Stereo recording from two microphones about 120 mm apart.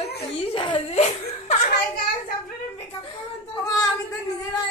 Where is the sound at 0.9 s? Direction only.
70° left (ahead or behind).